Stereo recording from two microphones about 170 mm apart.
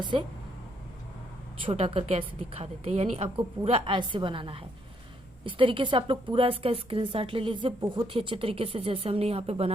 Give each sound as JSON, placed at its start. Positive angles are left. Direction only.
{"t": 0.0, "sound": "a woman's voice", "side_deg": -25}
{"t": 1.6, "sound": "a woman's voice", "side_deg": -35}